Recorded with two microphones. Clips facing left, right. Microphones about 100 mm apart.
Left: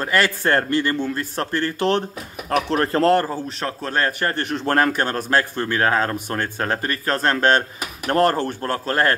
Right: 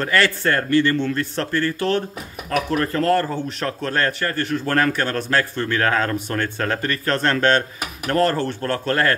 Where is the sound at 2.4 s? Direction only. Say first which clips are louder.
Left 1 dB; 35° left (ahead or behind).